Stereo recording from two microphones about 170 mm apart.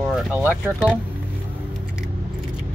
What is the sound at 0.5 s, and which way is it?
Speech, 5° right (ahead or behind).